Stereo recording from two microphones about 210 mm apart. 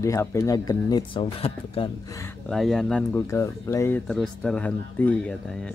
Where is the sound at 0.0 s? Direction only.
15° left (ahead or behind).